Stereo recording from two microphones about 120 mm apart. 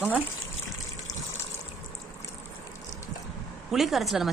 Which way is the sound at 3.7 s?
Centre (ahead or behind).